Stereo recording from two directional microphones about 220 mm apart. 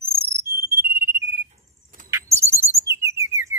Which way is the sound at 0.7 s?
10° right (ahead or behind).